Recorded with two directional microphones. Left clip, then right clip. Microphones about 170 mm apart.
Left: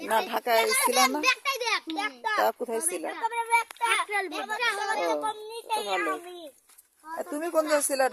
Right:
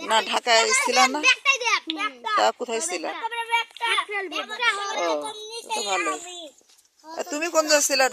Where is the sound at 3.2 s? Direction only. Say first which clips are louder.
Left 1 dB; 25° left (ahead or behind).